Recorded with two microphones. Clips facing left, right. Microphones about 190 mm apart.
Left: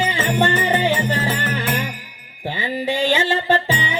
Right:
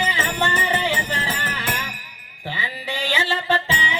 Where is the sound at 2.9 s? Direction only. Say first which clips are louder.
Left 6 dB; 45° left (ahead or behind).